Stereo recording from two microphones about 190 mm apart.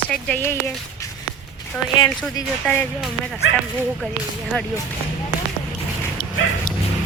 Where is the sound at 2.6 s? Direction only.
10° left (ahead or behind).